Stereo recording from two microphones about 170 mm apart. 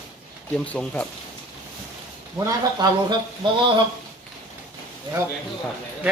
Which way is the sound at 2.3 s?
20° right (ahead or behind).